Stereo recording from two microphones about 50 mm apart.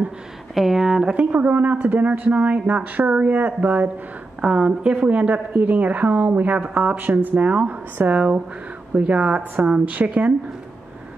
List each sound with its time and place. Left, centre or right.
0.6 s speech: centre
1.1 s a woman's voice: right
4.4 s a woman's voice: centre; by 8.1 s right
8.1 s speech: right